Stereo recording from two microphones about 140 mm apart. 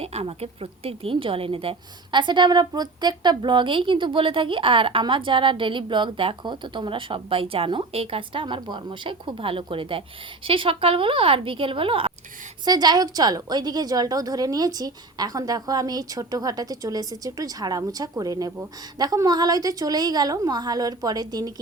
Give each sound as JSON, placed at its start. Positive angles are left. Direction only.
{"t": 0.0, "sound": "a woman's voice", "side_deg": -45}
{"t": 12.6, "sound": "a woman's voice", "side_deg": -30}